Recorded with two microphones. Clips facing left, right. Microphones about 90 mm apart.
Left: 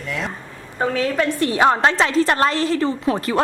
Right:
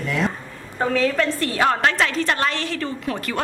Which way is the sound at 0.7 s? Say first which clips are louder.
Even; 15° left (ahead or behind).